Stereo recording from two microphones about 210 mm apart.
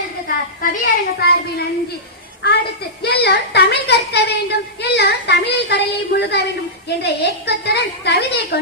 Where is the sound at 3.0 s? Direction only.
50° left (ahead or behind).